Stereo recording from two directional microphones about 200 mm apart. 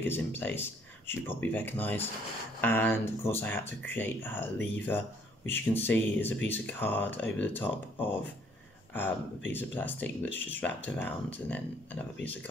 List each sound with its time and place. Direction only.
0.0 s speech: 10° left (ahead or behind)
9.5 s speech: 10° left (ahead or behind)